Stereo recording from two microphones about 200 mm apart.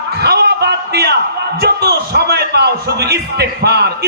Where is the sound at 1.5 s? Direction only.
55° right (ahead or behind).